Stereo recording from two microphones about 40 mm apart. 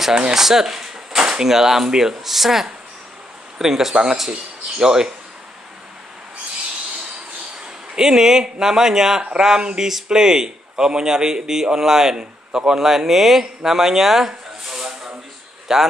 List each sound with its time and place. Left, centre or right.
0.3 s a man's voice: centre
7.9 s a man's voice: centre